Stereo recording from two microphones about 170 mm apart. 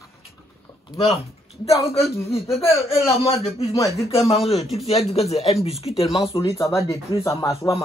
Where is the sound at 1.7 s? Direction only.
15° left (ahead or behind).